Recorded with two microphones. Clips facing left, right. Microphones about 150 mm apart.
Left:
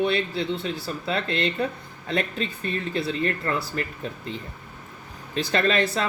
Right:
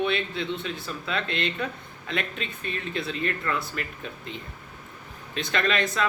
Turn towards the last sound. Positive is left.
turn(degrees=35)  # may be behind; listen again after turning